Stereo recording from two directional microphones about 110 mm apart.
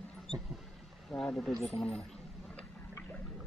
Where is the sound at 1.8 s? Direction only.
10° left (ahead or behind).